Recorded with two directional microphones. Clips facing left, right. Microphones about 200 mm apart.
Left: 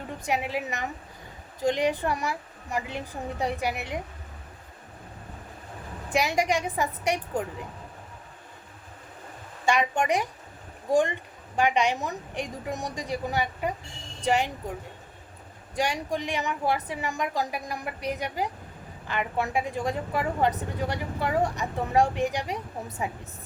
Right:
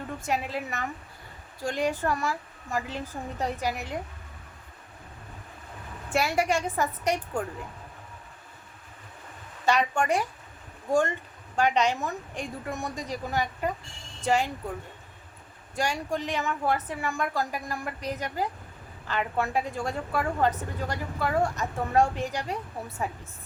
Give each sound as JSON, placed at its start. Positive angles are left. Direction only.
{"t": 0.3, "sound": "a woman's voice", "side_deg": 15}
{"t": 6.1, "sound": "a woman's voice", "side_deg": 15}
{"t": 9.6, "sound": "a woman's voice", "side_deg": 15}
{"t": 15.7, "sound": "a woman's voice", "side_deg": 15}